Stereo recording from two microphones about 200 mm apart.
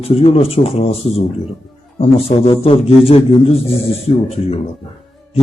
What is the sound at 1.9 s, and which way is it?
A man's voice, 30° left (ahead or behind).